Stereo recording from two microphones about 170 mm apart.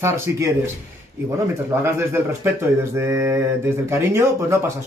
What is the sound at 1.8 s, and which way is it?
Speech, 15° right (ahead or behind).